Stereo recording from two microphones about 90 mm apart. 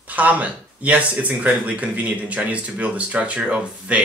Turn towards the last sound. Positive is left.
turn(degrees=-10)  # may be behind; listen again after turning